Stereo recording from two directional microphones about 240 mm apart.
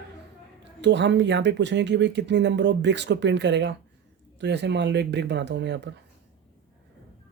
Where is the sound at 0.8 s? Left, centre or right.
Right.